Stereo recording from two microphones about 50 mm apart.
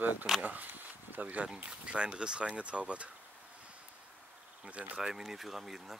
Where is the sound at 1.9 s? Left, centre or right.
Centre.